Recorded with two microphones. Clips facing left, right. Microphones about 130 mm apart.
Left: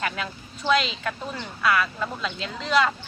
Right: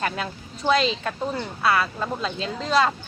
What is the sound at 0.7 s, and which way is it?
Speech, 30° right (ahead or behind).